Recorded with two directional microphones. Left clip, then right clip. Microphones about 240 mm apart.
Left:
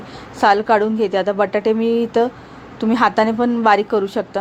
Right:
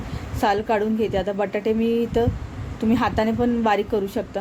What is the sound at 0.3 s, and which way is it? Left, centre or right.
A woman's voice, centre.